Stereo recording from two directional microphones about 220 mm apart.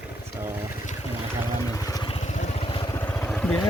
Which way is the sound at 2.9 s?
10° left (ahead or behind).